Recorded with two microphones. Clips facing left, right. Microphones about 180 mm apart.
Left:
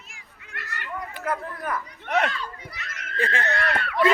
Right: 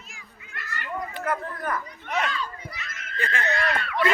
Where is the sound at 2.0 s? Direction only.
60° left (ahead or behind).